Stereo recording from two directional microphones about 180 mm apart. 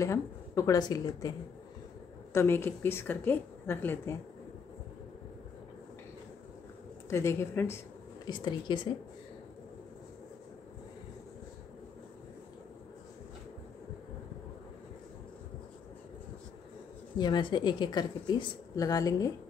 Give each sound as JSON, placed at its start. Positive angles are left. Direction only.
{"t": 0.0, "sound": "a woman's voice", "side_deg": 15}
{"t": 2.3, "sound": "a woman's voice", "side_deg": 15}
{"t": 7.1, "sound": "a woman's voice", "side_deg": 15}
{"t": 8.3, "sound": "a woman's voice", "side_deg": 25}
{"t": 17.2, "sound": "a woman's voice", "side_deg": 25}